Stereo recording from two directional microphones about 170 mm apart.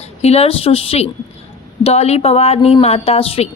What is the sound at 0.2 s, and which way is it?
A woman's voice, 40° left (ahead or behind).